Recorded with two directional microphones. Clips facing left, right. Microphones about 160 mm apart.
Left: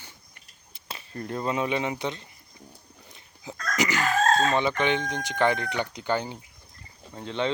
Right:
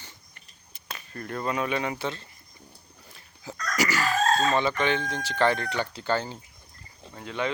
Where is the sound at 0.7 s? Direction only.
25° left (ahead or behind).